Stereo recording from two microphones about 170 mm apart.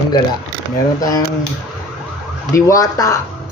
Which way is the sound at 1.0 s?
20° left (ahead or behind).